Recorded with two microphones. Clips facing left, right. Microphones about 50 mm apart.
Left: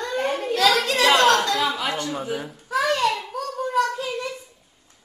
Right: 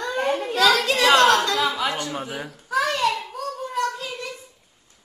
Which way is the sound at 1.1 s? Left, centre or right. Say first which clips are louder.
Right 1 dB; centre.